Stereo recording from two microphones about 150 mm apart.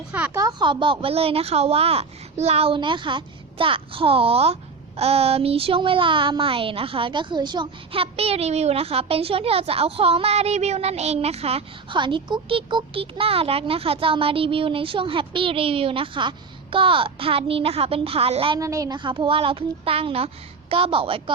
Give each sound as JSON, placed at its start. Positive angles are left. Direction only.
{"t": 0.3, "sound": "a woman's voice", "side_deg": -25}
{"t": 18.6, "sound": "a woman's voice", "side_deg": -20}